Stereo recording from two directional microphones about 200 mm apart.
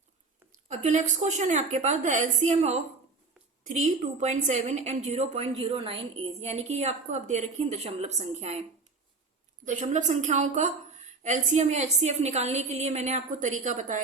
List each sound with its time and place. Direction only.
0.7 s a woman's voice: 35° right (ahead or behind)
9.6 s a woman's voice: 35° right (ahead or behind)